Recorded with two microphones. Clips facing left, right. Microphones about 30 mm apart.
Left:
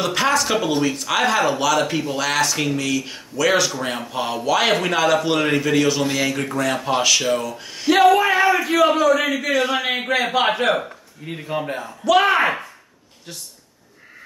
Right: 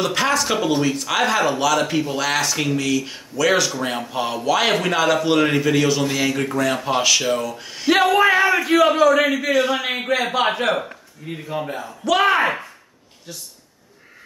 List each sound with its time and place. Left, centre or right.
0.0 s speech: centre
8.0 s a sound: centre
9.2 s speech: centre
11.2 s speech: left
11.8 s speech: centre